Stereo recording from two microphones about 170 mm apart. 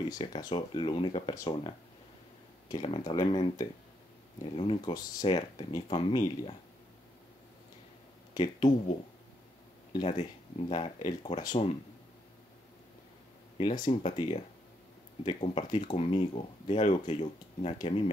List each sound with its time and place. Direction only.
0.1 s speech: 25° left (ahead or behind)
2.7 s speech: 25° left (ahead or behind)
8.4 s speech: 25° left (ahead or behind)
9.9 s speech: 30° left (ahead or behind)
13.6 s speech: 25° left (ahead or behind)